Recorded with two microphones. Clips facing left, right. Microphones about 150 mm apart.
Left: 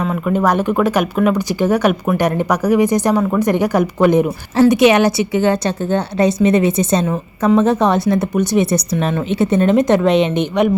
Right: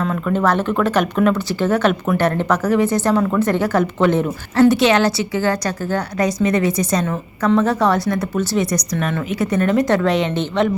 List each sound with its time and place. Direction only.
0.0 s a woman's voice: 10° left (ahead or behind)